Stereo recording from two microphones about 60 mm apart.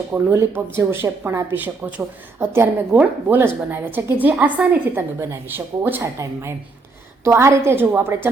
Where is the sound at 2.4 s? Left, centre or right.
Right.